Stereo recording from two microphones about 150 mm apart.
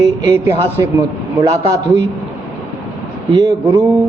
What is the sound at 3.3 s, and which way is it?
Speech, 25° right (ahead or behind).